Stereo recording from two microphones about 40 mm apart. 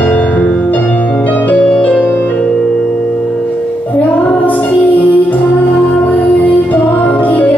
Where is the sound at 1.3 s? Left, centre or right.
Left.